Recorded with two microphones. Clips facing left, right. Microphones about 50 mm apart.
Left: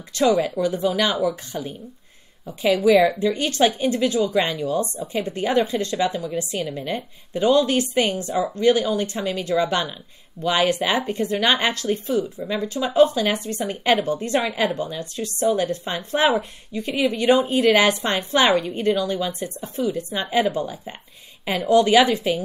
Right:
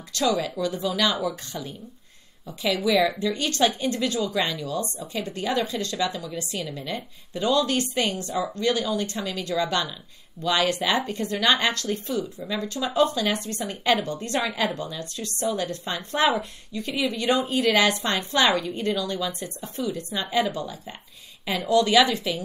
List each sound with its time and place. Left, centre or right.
0.1 s a woman's voice: left
1.1 s speech: centre
2.4 s a woman's voice: left